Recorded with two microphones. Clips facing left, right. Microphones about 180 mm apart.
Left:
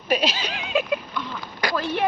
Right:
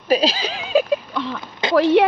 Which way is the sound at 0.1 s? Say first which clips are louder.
Right 5 dB; 35° right (ahead or behind).